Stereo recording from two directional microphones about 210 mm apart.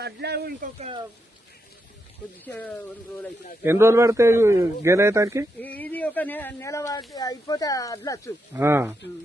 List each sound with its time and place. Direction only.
0.0 s speech: 50° right (ahead or behind)
0.8 s speech: 30° right (ahead or behind)
2.4 s speech: 10° left (ahead or behind)
3.6 s a man's voice: 10° right (ahead or behind)
5.6 s speech: 10° left (ahead or behind)
8.5 s a man's voice: 10° right (ahead or behind)